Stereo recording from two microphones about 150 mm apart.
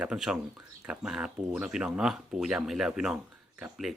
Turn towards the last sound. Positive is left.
turn(degrees=0)  # may be behind; listen again after turning